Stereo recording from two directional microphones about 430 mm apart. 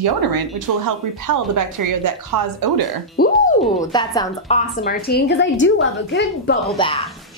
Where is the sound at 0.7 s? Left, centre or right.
Right.